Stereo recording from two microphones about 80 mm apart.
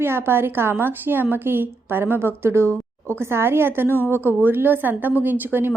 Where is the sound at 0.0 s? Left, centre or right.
Right.